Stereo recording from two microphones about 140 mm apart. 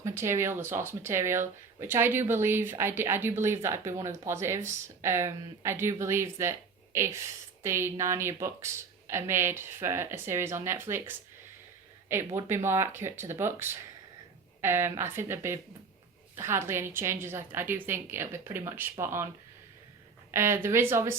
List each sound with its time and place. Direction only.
0.0 s a woman's voice: 20° right (ahead or behind)
20.3 s a woman's voice: 15° right (ahead or behind)